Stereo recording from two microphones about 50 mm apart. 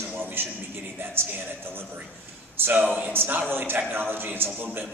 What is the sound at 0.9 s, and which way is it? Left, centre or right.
A man's voice, right.